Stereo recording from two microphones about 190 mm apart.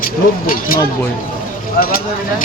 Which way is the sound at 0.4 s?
50° left (ahead or behind).